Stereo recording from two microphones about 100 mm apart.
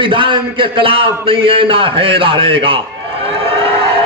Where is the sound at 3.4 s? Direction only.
70° right (ahead or behind).